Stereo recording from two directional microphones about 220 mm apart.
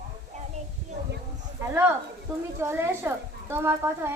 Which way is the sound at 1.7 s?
10° right (ahead or behind).